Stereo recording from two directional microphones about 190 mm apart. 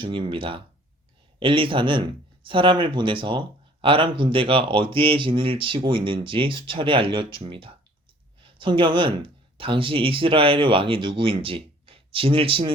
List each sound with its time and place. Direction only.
0.0 s speech: 25° right (ahead or behind)